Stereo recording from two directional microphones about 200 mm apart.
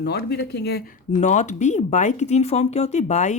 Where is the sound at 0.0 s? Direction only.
55° left (ahead or behind).